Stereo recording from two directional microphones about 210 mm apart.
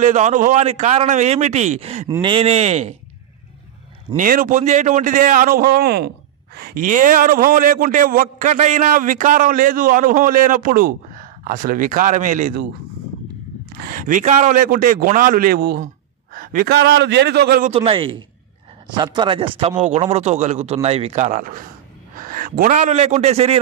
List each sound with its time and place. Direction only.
0.0 s a man's voice: 35° right (ahead or behind)
4.2 s a man's voice: 40° right (ahead or behind)
13.8 s a man's voice: 40° right (ahead or behind)
17.6 s a man's voice: 25° right (ahead or behind)